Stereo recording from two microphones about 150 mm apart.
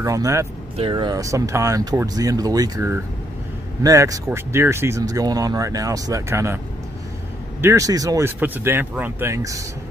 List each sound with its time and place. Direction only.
0.0 s speech: 20° right (ahead or behind)
0.7 s speech: 35° right (ahead or behind); by 6.6 s 20° right (ahead or behind)
7.6 s speech: 20° right (ahead or behind)